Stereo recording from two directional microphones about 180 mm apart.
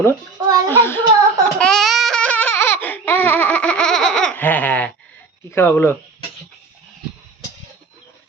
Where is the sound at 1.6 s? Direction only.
5° left (ahead or behind).